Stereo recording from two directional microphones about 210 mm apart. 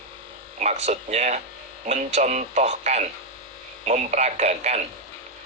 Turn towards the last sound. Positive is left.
turn(degrees=-35)  # may be behind; listen again after turning